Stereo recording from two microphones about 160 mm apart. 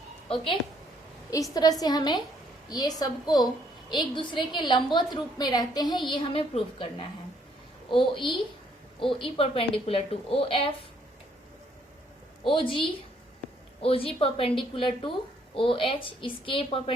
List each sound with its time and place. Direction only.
1.3 s a woman's voice: 20° left (ahead or behind)
12.5 s a woman's voice: 30° left (ahead or behind)